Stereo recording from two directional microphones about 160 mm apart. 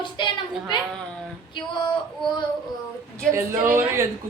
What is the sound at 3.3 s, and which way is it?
Speech, 15° right (ahead or behind).